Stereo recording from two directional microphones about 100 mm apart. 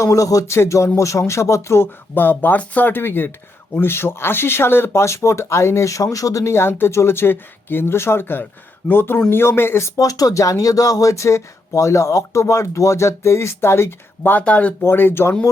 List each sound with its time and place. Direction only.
0.0 s music: 35° left (ahead or behind)
1.3 s speech: 30° left (ahead or behind)